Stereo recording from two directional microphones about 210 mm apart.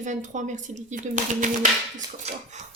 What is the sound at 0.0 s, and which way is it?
Speech, 35° right (ahead or behind).